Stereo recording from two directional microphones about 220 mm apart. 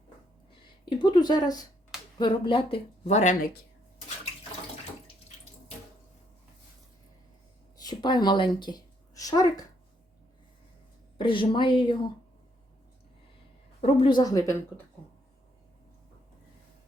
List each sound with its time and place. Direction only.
0.9 s speech: 20° left (ahead or behind)
7.8 s speech: 20° left (ahead or behind)
11.2 s speech: 20° left (ahead or behind)
13.8 s speech: 25° left (ahead or behind)